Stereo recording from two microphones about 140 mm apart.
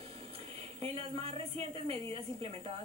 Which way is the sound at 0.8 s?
45° right (ahead or behind).